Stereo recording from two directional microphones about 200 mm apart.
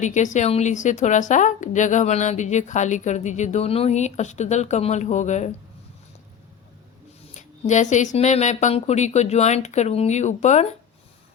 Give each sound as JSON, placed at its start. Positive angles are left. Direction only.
{"t": 0.0, "sound": "a woman's voice", "side_deg": 35}
{"t": 7.3, "sound": "a woman's voice", "side_deg": 35}